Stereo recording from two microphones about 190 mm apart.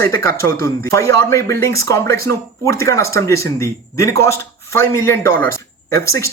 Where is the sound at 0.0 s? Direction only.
15° left (ahead or behind).